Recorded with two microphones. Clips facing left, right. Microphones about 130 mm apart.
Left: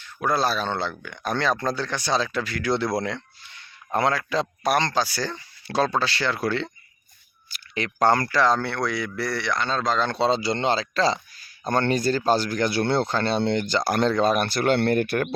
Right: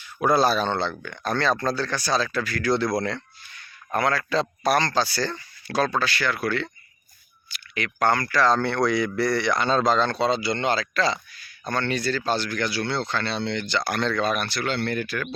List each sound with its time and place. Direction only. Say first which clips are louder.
0.0 s speech: right 3 dB; 5° right (ahead or behind); by 3.2 s 20° left (ahead or behind)
3.5 s a sound: left 1 dB; 25° left (ahead or behind)
4.2 s speech: right 1 dB; 15° left (ahead or behind)
5.6 s speech: left 1 dB; 25° left (ahead or behind)
7.9 s speech: left 2 dB; 35° left (ahead or behind)
8.4 s speech: right 1 dB; 10° left (ahead or behind); by 10.0 s 10° right (ahead or behind)
10.1 s speech: left 1 dB; 30° left (ahead or behind); by 15.3 s 60° left (ahead or behind)